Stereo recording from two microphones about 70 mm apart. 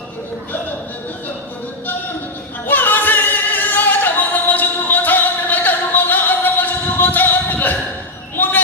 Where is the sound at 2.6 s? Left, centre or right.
Left.